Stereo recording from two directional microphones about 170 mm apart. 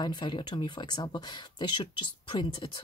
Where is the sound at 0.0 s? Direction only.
25° left (ahead or behind).